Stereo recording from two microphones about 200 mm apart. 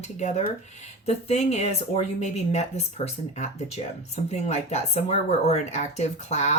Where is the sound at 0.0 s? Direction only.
35° left (ahead or behind).